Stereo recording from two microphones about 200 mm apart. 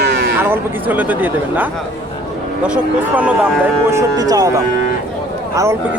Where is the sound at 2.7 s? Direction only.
5° right (ahead or behind).